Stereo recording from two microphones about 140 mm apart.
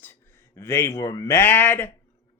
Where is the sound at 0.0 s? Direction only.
15° left (ahead or behind).